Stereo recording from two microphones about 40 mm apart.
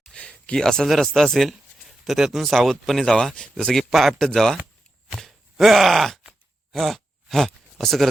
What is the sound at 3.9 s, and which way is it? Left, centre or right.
Speech, centre.